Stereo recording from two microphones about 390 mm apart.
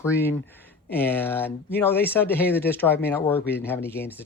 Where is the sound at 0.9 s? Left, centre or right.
Centre.